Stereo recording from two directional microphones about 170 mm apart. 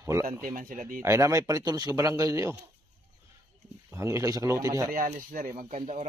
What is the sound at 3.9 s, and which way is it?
Speech, 15° right (ahead or behind).